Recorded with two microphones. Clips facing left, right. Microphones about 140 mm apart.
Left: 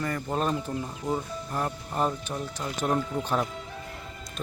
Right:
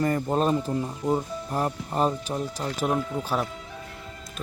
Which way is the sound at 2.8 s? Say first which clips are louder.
Even; 5° right (ahead or behind).